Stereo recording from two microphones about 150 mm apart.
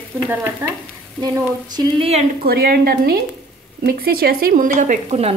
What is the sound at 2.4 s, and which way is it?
A woman's voice, 90° right.